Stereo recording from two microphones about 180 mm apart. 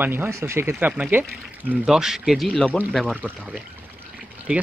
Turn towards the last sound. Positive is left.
turn(degrees=-5)  # may be behind; listen again after turning